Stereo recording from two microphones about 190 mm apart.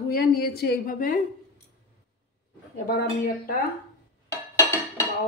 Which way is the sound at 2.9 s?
50° left (ahead or behind).